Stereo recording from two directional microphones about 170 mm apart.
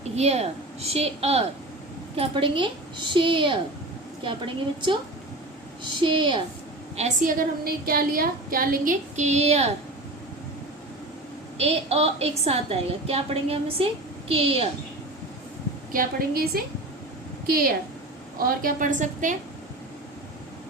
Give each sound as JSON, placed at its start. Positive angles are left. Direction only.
{"t": 0.0, "sound": "a woman's voice", "side_deg": -40}
{"t": 6.0, "sound": "a woman's voice", "side_deg": -30}
{"t": 6.9, "sound": "a woman's voice", "side_deg": -45}
{"t": 11.5, "sound": "a woman's voice", "side_deg": -40}
{"t": 15.9, "sound": "a woman's voice", "side_deg": -60}